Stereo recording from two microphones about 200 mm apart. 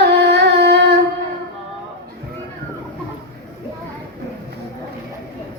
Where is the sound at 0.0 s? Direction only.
55° right (ahead or behind).